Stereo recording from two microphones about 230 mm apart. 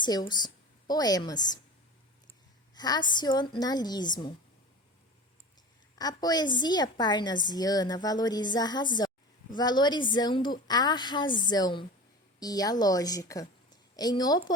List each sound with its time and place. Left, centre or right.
0.0 s a woman's voice: centre
2.7 s a woman's voice: centre
6.0 s a woman's voice: centre